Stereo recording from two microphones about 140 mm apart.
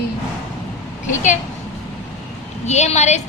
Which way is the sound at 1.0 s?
60° left (ahead or behind).